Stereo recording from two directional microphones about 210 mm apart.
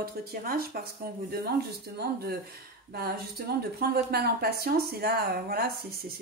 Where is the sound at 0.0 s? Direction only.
45° right (ahead or behind).